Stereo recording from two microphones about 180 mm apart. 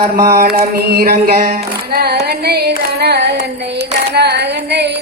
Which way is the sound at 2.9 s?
60° right (ahead or behind).